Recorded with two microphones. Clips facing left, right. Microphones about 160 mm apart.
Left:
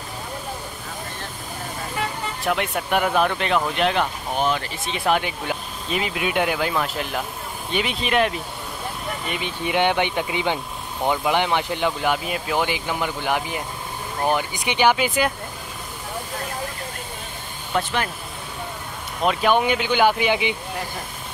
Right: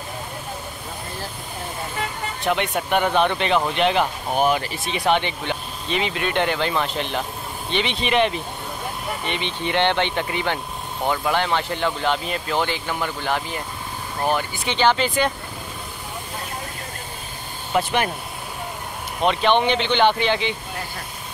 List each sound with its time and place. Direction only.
2.4 s speech: centre (ahead or behind)
4.9 s speech: 5° left (ahead or behind)
17.7 s speech: 5° right (ahead or behind)
19.2 s speech: 5° left (ahead or behind)